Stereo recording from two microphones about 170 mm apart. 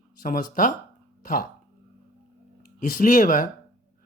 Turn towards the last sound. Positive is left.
turn(degrees=50)  # may be behind; listen again after turning